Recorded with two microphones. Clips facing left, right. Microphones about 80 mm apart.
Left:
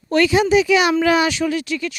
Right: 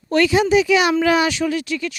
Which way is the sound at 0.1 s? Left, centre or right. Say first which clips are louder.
Even; left.